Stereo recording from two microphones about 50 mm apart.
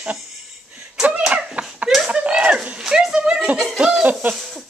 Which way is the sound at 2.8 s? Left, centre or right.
Centre.